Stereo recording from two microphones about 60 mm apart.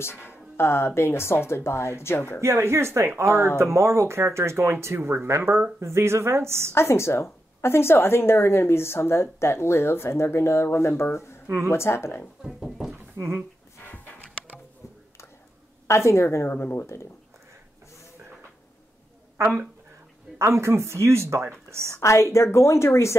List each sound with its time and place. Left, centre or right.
0.0 s a woman's voice: left
2.4 s speech: right
6.7 s a woman's voice: left
12.4 s a sound: centre
13.2 s speech: right
13.8 s music: left
15.9 s a woman's voice: left
16.4 s speech: left
20.3 s speech: right
22.0 s a woman's voice: left